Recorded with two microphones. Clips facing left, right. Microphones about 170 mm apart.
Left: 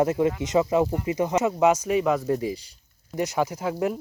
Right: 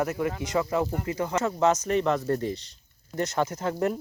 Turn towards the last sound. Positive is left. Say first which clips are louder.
# left 1 dB
turn(degrees=5)  # may be behind; listen again after turning